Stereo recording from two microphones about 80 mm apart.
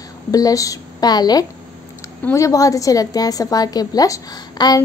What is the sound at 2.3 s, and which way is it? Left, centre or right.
A woman's voice, left.